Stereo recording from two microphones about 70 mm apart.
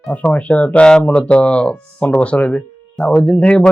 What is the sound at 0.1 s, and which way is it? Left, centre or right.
A man's voice, centre.